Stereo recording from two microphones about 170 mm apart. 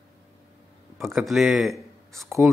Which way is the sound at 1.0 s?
Centre (ahead or behind).